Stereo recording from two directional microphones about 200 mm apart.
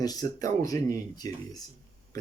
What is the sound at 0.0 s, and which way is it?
Speech, 20° left (ahead or behind).